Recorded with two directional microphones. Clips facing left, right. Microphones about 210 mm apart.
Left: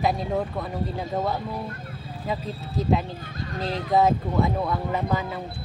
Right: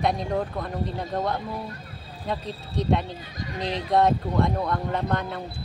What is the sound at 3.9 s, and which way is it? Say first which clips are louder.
Speech: even; 5° left (ahead or behind).